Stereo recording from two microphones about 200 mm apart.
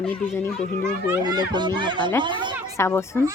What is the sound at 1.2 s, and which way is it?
Speech, 20° right (ahead or behind).